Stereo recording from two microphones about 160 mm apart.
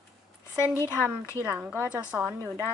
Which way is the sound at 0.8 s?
15° left (ahead or behind).